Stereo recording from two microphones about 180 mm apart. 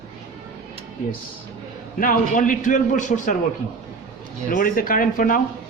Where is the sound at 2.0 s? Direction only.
50° left (ahead or behind).